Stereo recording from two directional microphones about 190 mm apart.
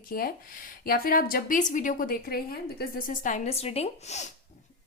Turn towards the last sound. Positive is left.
turn(degrees=35)  # may be behind; listen again after turning